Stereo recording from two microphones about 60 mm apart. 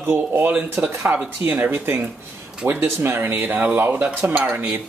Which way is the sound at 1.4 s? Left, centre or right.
Right.